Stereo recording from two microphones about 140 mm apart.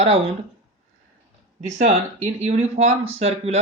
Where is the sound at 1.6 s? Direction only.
55° right (ahead or behind).